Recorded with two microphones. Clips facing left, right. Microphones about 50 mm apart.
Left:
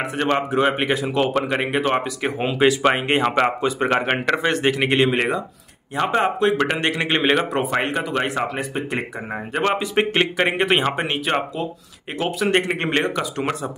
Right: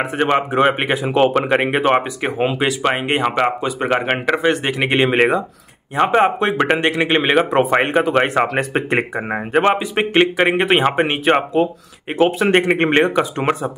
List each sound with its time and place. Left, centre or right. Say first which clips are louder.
0.0 s a man's voice: right 4 dB; centre
2.2 s speech: right 4 dB; centre
2.6 s speech: left 1 dB; centre
4.9 s a man's voice: right 4 dB; right
6.8 s speech: right 4 dB; centre
7.5 s speech: right 7 dB; right
9.1 s speech: right 8 dB; right
9.8 s a man's voice: right 4 dB; centre; by 13.7 s right